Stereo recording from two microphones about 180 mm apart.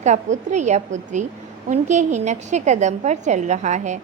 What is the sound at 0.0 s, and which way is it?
A woman's voice, 40° right (ahead or behind).